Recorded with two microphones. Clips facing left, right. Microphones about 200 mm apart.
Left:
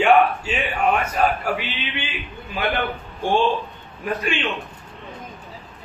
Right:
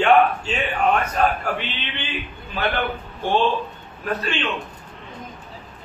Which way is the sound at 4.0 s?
15° left (ahead or behind).